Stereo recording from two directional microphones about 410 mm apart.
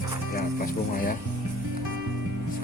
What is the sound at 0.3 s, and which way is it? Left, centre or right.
Speech, left.